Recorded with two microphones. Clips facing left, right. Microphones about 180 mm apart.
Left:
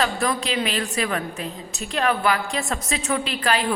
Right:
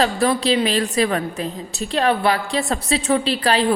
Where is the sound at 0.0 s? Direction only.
35° right (ahead or behind).